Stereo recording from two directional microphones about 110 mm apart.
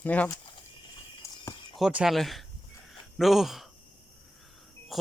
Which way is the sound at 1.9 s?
5° right (ahead or behind).